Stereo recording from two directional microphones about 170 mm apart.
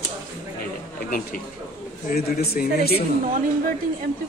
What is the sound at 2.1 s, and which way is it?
Speech, 60° left (ahead or behind).